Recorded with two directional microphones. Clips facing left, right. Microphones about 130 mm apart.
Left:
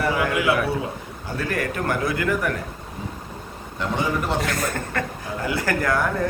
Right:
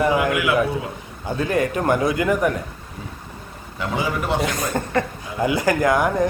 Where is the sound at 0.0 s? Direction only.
20° right (ahead or behind).